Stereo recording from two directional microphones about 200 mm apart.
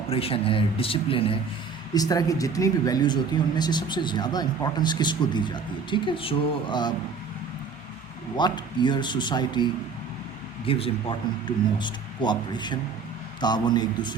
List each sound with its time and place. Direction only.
0.1 s speech: 30° left (ahead or behind)
8.4 s speech: 20° left (ahead or behind)
10.7 s speech: 30° left (ahead or behind)